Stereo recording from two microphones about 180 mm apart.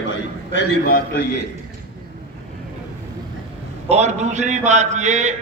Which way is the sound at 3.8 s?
40° right (ahead or behind).